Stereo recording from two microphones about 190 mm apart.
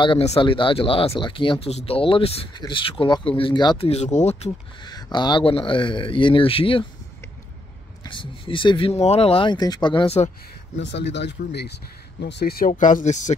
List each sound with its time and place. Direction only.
0.0 s speech: 30° left (ahead or behind)
4.8 s speech: 20° left (ahead or behind)
8.0 s speech: 25° left (ahead or behind)
10.8 s speech: 65° left (ahead or behind); by 13.3 s 40° left (ahead or behind)